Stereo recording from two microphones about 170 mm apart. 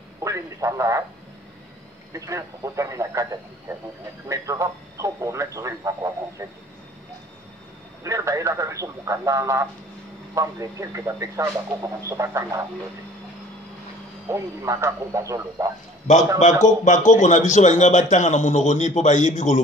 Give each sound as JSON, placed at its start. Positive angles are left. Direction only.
{"t": 0.2, "sound": "a sound", "side_deg": -20}
{"t": 2.1, "sound": "speech", "side_deg": -20}
{"t": 8.0, "sound": "speech", "side_deg": -20}
{"t": 14.3, "sound": "speech", "side_deg": -15}
{"t": 16.6, "sound": "a man's voice", "side_deg": 45}